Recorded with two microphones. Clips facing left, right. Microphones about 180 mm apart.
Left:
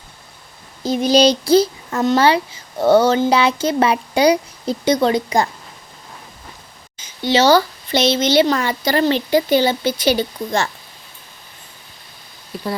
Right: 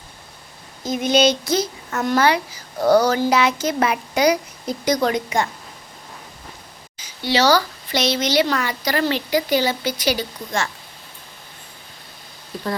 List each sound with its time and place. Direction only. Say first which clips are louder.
0.8 s a child's voice: left 4 dB; 30° left (ahead or behind)
6.9 s speech: left 4 dB; 25° left (ahead or behind)